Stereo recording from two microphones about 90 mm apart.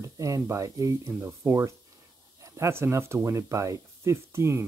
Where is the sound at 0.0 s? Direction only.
35° right (ahead or behind).